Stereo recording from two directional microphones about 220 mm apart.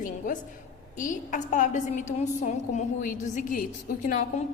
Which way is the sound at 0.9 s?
35° left (ahead or behind).